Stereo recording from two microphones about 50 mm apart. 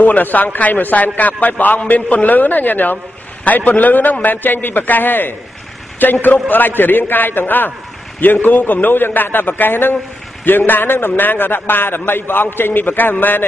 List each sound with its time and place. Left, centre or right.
0.0 s a man's voice: left